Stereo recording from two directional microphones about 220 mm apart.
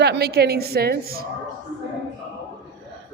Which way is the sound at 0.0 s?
50° right (ahead or behind).